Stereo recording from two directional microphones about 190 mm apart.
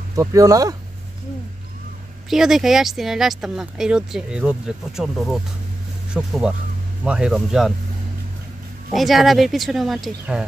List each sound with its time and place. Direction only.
0.1 s speech: 15° right (ahead or behind)
2.2 s speech: centre (ahead or behind)
8.9 s speech: centre (ahead or behind)